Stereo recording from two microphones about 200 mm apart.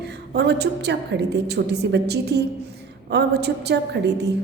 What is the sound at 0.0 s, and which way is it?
A woman's voice, 60° right (ahead or behind).